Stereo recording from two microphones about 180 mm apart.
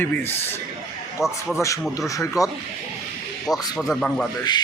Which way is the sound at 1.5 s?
15° left (ahead or behind).